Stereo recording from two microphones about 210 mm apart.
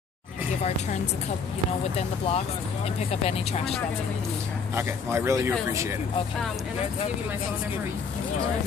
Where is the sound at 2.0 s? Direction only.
30° left (ahead or behind).